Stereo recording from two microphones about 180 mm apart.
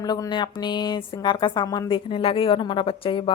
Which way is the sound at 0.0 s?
20° left (ahead or behind).